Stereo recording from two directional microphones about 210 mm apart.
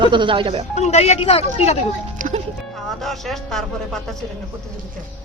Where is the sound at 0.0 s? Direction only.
20° right (ahead or behind).